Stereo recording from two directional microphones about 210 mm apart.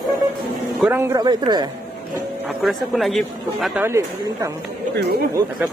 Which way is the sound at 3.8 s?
15° right (ahead or behind).